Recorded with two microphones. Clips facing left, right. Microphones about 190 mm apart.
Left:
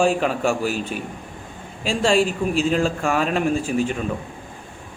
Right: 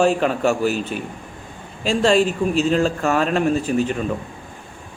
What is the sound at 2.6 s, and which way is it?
Speech, 5° left (ahead or behind).